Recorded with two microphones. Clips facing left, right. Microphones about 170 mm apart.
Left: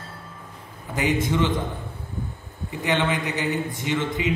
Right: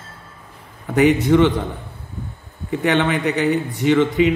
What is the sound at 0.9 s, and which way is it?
Speech, 65° right (ahead or behind).